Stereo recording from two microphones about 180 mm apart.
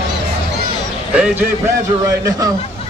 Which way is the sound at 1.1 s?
5° right (ahead or behind).